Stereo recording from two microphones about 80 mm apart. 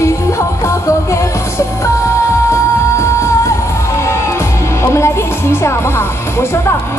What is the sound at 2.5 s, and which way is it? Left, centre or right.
Music, left.